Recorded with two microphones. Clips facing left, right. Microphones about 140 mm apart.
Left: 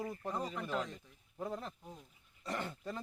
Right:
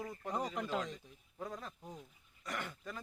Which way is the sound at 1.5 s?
20° left (ahead or behind).